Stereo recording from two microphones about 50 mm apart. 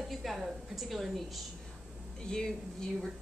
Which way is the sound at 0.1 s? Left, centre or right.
Centre.